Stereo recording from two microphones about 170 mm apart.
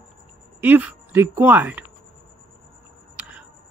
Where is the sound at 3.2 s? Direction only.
5° right (ahead or behind).